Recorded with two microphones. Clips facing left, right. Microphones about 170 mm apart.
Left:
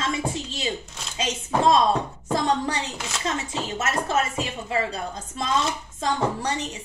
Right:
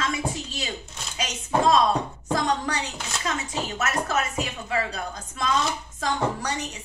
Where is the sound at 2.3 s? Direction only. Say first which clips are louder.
Left 2 dB; 25° left (ahead or behind).